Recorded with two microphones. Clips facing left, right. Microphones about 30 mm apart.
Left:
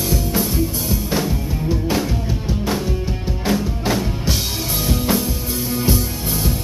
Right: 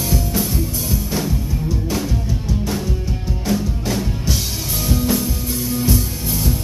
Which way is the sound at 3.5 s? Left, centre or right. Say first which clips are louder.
Left 2 dB; left.